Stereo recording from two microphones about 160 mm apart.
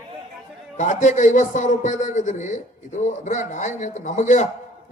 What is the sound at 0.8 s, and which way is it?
Speech, 50° left (ahead or behind).